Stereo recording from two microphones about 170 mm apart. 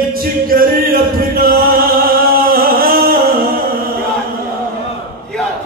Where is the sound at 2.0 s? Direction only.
60° right (ahead or behind).